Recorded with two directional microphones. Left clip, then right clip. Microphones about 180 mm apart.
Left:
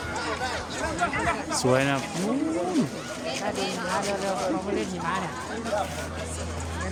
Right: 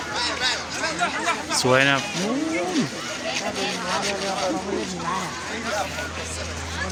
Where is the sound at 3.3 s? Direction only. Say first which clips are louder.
Right 1 dB; 90° left.